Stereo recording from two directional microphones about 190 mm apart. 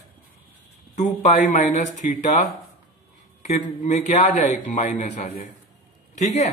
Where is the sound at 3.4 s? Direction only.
40° left (ahead or behind).